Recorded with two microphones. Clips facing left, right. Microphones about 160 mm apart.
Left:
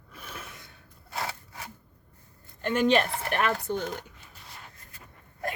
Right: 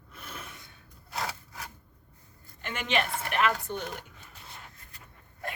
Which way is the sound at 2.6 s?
40° left (ahead or behind).